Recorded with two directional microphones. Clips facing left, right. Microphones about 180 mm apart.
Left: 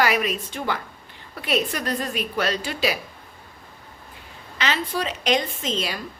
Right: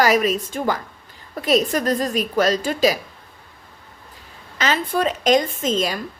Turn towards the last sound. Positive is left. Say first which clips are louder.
# right 6 dB
turn(degrees=-45)  # may be behind; listen again after turning